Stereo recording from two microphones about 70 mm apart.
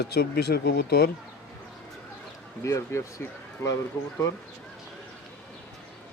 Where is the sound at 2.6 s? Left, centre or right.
Left.